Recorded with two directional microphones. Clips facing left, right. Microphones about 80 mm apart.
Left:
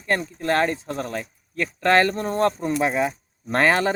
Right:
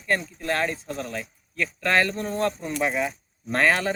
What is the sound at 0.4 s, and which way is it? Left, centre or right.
Speech, left.